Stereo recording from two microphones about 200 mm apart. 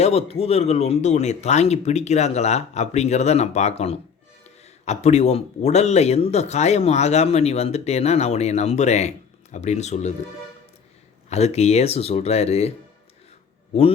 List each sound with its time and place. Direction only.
0.0 s speech: 30° left (ahead or behind)
11.3 s speech: 30° left (ahead or behind)